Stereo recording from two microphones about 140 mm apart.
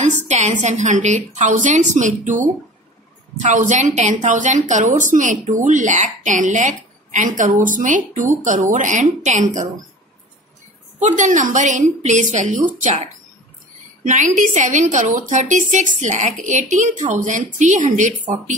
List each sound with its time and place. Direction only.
0.3 s a woman's voice: 55° right (ahead or behind)
11.0 s a woman's voice: 60° right (ahead or behind)